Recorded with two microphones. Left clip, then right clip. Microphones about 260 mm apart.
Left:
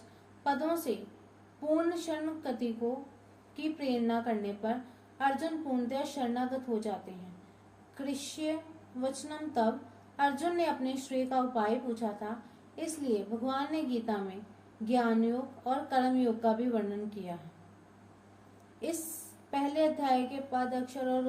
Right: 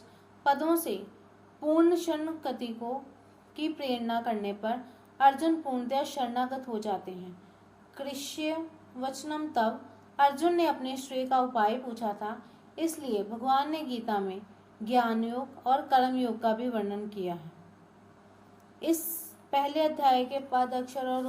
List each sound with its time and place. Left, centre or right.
0.4 s a woman's voice: right
7.9 s a woman's voice: right
18.8 s a woman's voice: right